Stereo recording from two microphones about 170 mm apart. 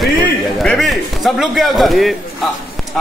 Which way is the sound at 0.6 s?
Centre (ahead or behind).